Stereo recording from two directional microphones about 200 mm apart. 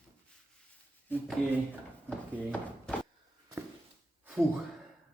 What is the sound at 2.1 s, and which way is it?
Speech, 5° left (ahead or behind).